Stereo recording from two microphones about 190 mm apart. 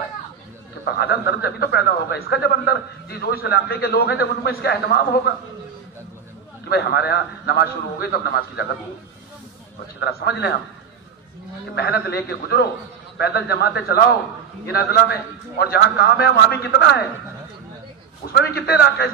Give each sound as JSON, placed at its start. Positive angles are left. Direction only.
{"t": 0.8, "sound": "a man's voice", "side_deg": 60}
{"t": 6.6, "sound": "a man's voice", "side_deg": 60}
{"t": 9.9, "sound": "a man's voice", "side_deg": 60}
{"t": 11.7, "sound": "a man's voice", "side_deg": 55}
{"t": 18.3, "sound": "a man's voice", "side_deg": 55}